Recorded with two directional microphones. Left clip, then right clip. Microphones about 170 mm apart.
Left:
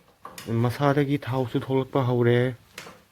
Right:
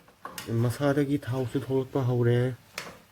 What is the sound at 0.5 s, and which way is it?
Speech, 40° left (ahead or behind).